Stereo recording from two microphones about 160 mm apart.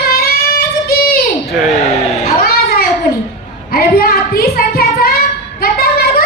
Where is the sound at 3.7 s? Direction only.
65° left (ahead or behind).